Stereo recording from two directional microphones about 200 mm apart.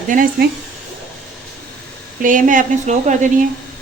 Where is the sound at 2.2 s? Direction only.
40° right (ahead or behind).